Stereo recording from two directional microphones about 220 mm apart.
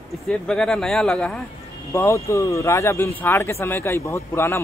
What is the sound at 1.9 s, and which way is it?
A man's voice, 15° left (ahead or behind).